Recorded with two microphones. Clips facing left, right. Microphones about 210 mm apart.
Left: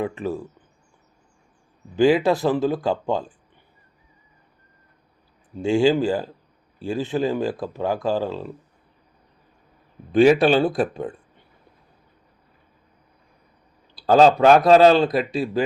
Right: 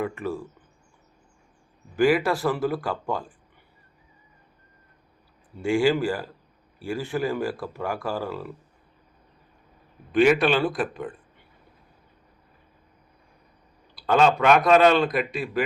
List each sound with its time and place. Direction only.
0.0 s speech: 20° left (ahead or behind)
2.0 s speech: 25° left (ahead or behind)
5.5 s speech: 25° left (ahead or behind)
10.1 s speech: 35° left (ahead or behind)
13.9 s speech: 35° left (ahead or behind)